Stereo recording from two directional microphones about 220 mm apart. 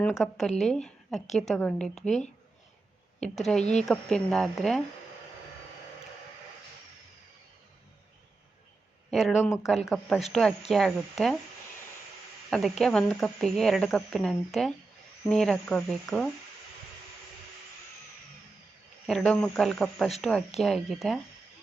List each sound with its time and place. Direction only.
0.1 s a woman's voice: centre (ahead or behind)
2.0 s speech: 30° left (ahead or behind)
3.2 s speech: centre (ahead or behind)
9.0 s speech: centre (ahead or behind)
12.5 s speech: centre (ahead or behind)
19.0 s speech: centre (ahead or behind)